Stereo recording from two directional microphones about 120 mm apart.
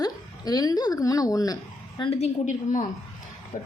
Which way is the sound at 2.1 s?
75° left (ahead or behind).